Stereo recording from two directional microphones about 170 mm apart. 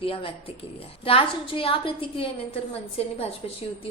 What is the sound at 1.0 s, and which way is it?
A woman's voice, 35° left (ahead or behind).